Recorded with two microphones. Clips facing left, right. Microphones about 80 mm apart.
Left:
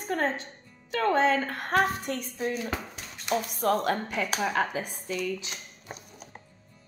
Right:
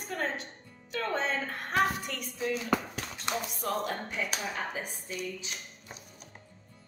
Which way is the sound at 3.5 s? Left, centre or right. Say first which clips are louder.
Left 10 dB; left.